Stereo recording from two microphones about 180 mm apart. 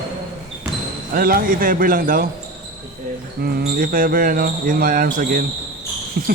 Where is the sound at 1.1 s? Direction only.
55° right (ahead or behind).